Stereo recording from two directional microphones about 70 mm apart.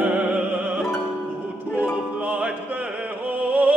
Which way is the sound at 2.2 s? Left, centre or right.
Centre.